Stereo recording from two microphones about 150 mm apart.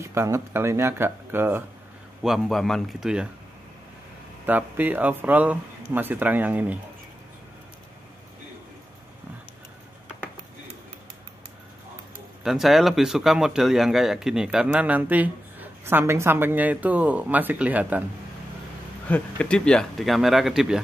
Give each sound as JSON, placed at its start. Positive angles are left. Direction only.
{"t": 0.0, "sound": "speech", "side_deg": -15}
{"t": 2.2, "sound": "speech", "side_deg": 0}
{"t": 4.5, "sound": "speech", "side_deg": -10}
{"t": 12.4, "sound": "speech", "side_deg": 0}
{"t": 19.0, "sound": "speech", "side_deg": 10}